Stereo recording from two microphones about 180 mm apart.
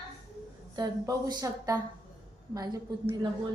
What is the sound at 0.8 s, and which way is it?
A woman's voice, 20° right (ahead or behind).